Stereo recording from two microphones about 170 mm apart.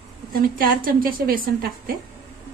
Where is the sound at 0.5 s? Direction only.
55° right (ahead or behind).